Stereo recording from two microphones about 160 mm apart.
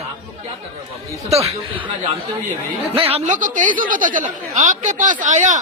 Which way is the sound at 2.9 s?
40° right (ahead or behind).